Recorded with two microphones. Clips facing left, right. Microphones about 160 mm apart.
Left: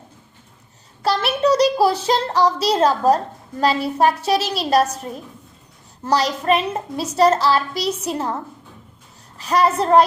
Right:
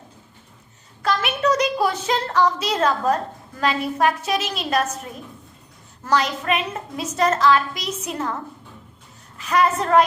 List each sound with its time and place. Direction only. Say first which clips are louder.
1.0 s a woman's voice: left 3 dB; 35° left (ahead or behind)
6.1 s a woman's voice: left 3 dB; 35° left (ahead or behind)
9.4 s a woman's voice: left 2 dB; 35° left (ahead or behind)